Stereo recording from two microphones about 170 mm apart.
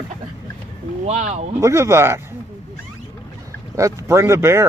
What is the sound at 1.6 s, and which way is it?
Speech, 15° right (ahead or behind).